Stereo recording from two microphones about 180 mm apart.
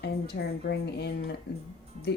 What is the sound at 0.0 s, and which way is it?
A woman's voice, 65° left (ahead or behind).